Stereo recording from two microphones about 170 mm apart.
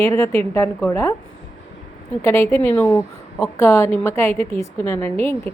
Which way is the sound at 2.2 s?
15° left (ahead or behind).